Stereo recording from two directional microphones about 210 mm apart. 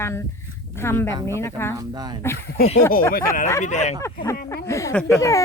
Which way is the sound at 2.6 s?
45° left (ahead or behind).